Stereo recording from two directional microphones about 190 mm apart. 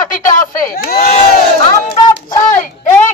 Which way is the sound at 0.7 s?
50° left (ahead or behind).